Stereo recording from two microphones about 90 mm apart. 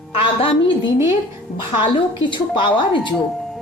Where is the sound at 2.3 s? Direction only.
65° left (ahead or behind).